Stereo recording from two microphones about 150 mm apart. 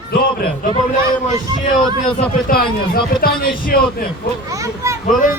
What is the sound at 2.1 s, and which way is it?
A man's voice, 75° left (ahead or behind).